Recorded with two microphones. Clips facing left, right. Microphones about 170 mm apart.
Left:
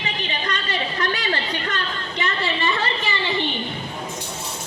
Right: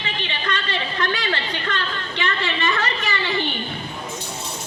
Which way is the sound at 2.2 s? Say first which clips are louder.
Even; 35° left (ahead or behind).